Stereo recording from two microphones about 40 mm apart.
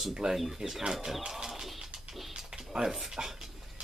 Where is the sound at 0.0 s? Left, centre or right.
Centre.